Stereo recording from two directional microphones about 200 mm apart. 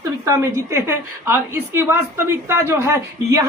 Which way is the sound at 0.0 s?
15° right (ahead or behind).